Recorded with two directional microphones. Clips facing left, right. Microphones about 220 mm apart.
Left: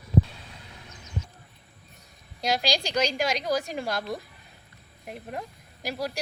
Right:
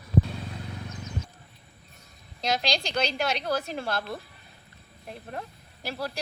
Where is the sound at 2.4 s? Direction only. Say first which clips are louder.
Left 1 dB; 10° left (ahead or behind).